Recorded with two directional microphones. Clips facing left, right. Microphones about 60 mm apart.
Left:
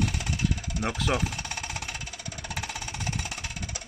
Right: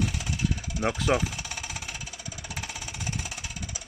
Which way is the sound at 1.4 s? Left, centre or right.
Left.